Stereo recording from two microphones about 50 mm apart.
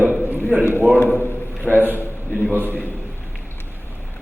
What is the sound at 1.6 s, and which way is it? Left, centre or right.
Speech, right.